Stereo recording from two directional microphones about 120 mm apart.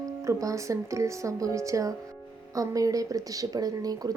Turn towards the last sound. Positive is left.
turn(degrees=-30)  # may be behind; listen again after turning